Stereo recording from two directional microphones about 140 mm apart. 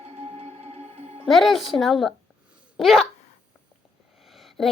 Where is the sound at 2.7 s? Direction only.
Centre (ahead or behind).